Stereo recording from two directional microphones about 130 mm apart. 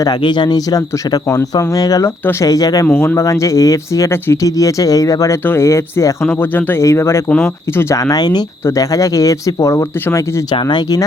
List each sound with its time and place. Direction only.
0.0 s speech: 35° left (ahead or behind)
2.8 s speech: 15° left (ahead or behind)
10.5 s speech: 35° left (ahead or behind)